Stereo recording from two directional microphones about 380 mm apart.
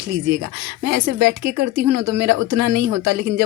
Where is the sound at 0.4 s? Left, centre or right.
Right.